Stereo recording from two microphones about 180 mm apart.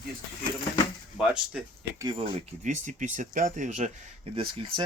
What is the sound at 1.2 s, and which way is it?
Speech, 5° right (ahead or behind).